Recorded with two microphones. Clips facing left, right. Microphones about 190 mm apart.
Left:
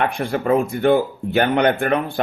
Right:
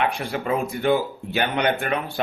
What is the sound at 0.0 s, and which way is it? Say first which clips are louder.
Speech: left 4 dB; 50° left (ahead or behind).